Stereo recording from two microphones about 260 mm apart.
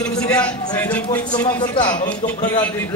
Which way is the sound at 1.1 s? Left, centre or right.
Centre.